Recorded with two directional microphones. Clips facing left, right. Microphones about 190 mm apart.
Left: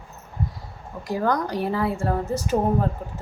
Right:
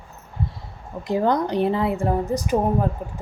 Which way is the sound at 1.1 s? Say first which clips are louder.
Right 3 dB; 20° right (ahead or behind).